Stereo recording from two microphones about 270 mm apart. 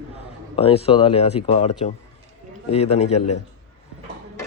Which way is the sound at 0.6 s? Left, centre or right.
Left.